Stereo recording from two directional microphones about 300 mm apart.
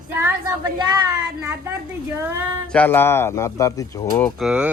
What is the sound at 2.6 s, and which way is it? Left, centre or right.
Speech, centre.